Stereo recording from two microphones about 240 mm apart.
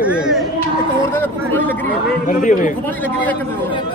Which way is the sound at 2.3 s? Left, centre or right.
Left.